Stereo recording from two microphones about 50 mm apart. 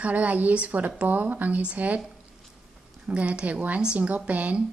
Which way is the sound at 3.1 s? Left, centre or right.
Right.